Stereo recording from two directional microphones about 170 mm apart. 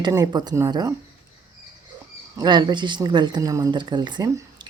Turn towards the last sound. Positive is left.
turn(degrees=-25)  # may be behind; listen again after turning